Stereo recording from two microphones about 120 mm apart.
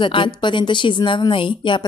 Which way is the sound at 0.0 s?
45° left (ahead or behind).